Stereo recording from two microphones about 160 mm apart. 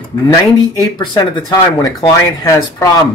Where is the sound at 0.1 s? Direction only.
20° left (ahead or behind).